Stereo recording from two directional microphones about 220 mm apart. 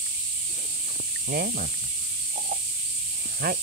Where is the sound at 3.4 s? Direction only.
45° right (ahead or behind).